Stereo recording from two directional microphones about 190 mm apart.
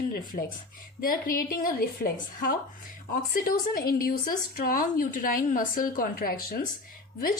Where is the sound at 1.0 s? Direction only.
50° left (ahead or behind).